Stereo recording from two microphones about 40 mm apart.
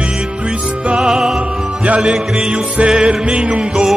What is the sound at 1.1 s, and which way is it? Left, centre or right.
Music, centre.